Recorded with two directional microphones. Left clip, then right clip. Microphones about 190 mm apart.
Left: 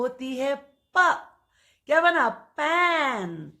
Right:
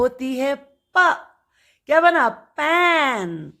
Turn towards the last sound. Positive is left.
turn(degrees=-35)  # may be behind; listen again after turning